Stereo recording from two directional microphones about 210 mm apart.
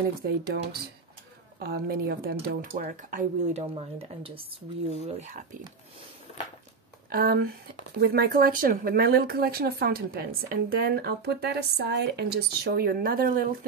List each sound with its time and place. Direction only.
0.4 s speech: 50° right (ahead or behind)
7.1 s speech: 45° right (ahead or behind)